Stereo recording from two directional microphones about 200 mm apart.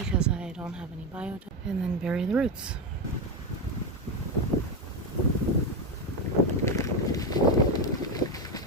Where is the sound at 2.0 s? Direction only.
5° right (ahead or behind).